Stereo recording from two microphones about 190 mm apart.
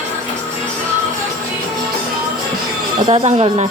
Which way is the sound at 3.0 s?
30° right (ahead or behind).